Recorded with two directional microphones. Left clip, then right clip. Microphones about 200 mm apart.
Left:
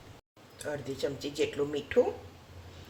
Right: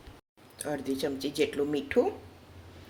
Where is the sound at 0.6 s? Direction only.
40° right (ahead or behind).